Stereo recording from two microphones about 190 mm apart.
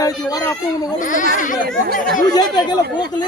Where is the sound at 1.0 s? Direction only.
45° left (ahead or behind).